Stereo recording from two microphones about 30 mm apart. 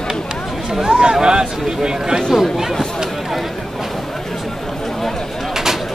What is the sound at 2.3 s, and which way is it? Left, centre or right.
Speech, centre.